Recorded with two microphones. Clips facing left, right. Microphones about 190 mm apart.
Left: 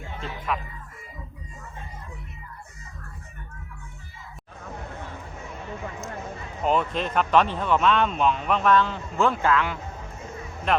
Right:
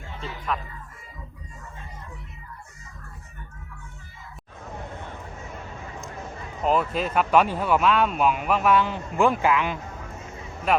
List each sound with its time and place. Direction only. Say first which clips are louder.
0.2 s speech: even; 5° left (ahead or behind)
6.6 s speech: right 1 dB; 5° right (ahead or behind)